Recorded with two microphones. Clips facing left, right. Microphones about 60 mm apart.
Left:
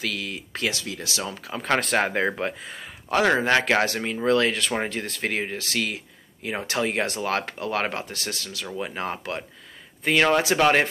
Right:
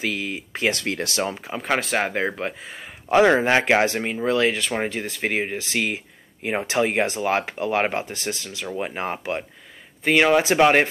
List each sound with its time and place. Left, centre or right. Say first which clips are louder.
0.0 s speech: right 4 dB; right
0.7 s speech: right 6 dB; right
1.3 s speech: right 2 dB; centre
1.7 s speech: even; centre
3.1 s speech: right 4 dB; centre
4.2 s speech: even; centre